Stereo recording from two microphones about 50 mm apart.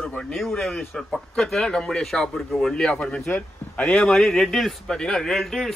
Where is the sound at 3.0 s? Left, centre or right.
Left.